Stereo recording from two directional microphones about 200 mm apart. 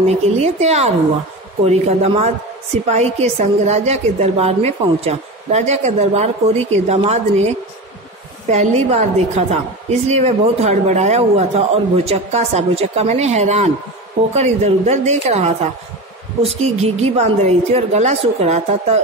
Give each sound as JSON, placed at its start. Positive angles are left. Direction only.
{"t": 0.0, "sound": "a woman's voice", "side_deg": -35}